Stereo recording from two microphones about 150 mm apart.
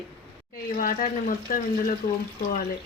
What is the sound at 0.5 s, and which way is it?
Speech, 70° left (ahead or behind).